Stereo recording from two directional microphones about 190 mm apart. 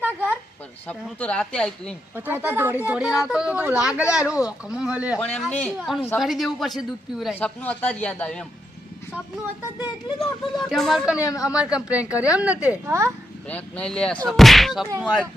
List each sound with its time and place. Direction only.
0.0 s a sound: 10° right (ahead or behind)
0.9 s speech: 5° left (ahead or behind)
2.1 s speech: 10° right (ahead or behind)
5.2 s a man's voice: 5° left (ahead or behind)
10.2 s speech: centre (ahead or behind)
11.2 s a man's voice: 15° left (ahead or behind)
11.5 s speech: 5° right (ahead or behind)
13.5 s speech: 5° left (ahead or behind)